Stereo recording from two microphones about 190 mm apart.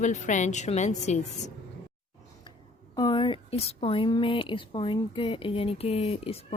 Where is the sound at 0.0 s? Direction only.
40° left (ahead or behind).